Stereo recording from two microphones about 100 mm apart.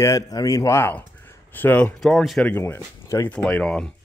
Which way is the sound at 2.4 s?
25° left (ahead or behind).